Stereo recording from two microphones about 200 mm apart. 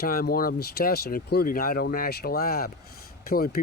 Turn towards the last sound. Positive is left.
turn(degrees=50)  # may be behind; listen again after turning